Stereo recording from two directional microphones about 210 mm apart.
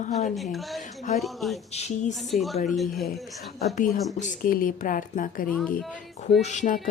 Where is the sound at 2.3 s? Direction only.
Centre (ahead or behind).